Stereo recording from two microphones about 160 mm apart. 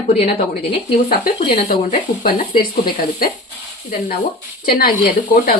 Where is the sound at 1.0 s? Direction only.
65° left (ahead or behind).